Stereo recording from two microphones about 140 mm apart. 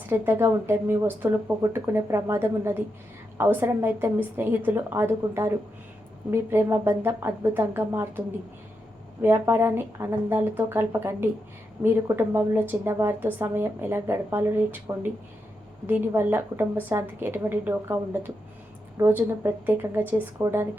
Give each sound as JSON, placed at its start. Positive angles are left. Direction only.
{"t": 0.1, "sound": "a woman's voice", "side_deg": -15}
{"t": 9.2, "sound": "a woman's voice", "side_deg": -15}